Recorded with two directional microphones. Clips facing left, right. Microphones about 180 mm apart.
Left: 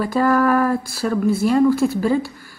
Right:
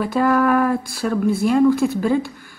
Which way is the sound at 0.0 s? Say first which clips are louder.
Even; centre (ahead or behind).